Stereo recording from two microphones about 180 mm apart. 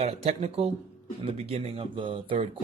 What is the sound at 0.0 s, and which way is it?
Speech, 35° right (ahead or behind).